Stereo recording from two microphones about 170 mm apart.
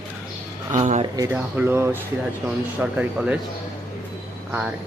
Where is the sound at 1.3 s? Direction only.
10° right (ahead or behind).